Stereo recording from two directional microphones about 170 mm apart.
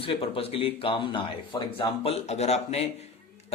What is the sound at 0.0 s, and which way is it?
Speech, 35° left (ahead or behind).